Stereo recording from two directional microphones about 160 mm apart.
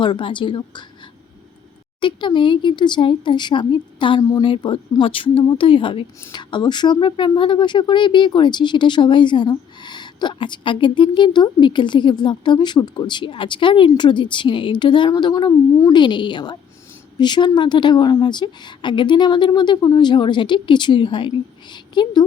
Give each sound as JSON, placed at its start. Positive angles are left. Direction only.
{"t": 0.0, "sound": "a woman's voice", "side_deg": 30}
{"t": 2.0, "sound": "speech", "side_deg": 30}